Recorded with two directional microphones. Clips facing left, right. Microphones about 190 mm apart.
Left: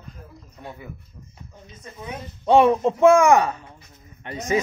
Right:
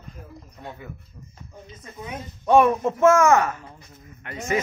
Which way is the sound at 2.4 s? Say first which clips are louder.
Left 1 dB; 20° left (ahead or behind).